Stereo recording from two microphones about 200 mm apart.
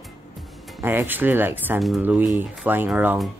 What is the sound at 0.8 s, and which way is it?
Speech, 10° right (ahead or behind).